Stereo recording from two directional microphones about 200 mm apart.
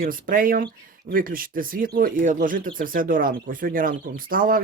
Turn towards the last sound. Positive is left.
turn(degrees=-45)  # may be behind; listen again after turning